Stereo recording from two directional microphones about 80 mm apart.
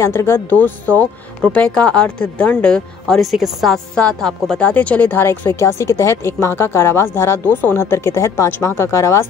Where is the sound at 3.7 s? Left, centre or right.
Centre; by 9.2 s left.